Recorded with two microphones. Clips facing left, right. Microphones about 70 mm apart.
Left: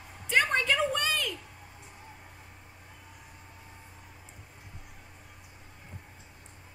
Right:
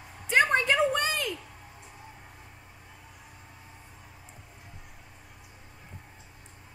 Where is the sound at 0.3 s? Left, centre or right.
Centre.